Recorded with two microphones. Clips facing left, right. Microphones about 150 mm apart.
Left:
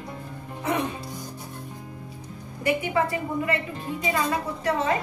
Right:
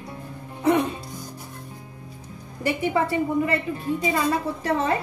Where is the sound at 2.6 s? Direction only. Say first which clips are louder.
Right 1 dB; 30° right (ahead or behind).